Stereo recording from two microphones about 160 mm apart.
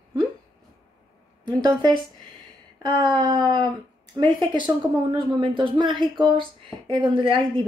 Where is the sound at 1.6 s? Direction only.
25° right (ahead or behind).